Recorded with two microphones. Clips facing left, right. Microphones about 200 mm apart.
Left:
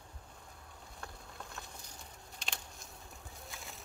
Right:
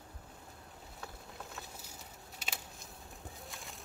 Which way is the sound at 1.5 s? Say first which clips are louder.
Right 1 dB; 5° right (ahead or behind).